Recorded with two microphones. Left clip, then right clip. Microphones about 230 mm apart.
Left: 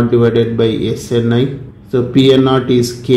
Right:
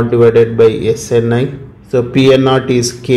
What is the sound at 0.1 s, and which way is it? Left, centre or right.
A man's voice, right.